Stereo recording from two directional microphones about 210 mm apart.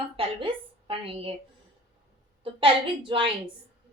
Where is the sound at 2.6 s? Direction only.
25° right (ahead or behind).